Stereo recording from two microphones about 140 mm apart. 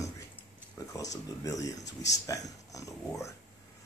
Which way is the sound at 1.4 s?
25° left (ahead or behind).